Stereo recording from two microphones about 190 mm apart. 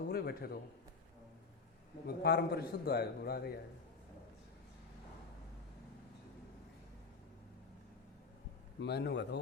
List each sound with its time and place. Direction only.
0.1 s a man's voice: 55° left (ahead or behind)
2.0 s a man's voice: 55° left (ahead or behind)
8.8 s a man's voice: 60° left (ahead or behind)